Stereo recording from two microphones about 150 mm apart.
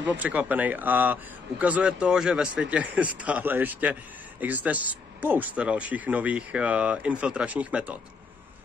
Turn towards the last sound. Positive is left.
turn(degrees=-10)  # may be behind; listen again after turning